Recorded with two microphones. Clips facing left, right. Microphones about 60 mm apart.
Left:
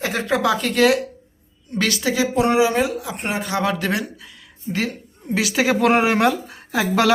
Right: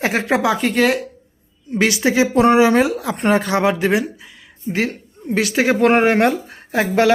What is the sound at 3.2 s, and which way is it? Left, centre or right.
Speech, right.